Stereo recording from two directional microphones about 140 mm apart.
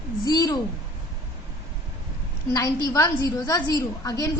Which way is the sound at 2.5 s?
25° left (ahead or behind).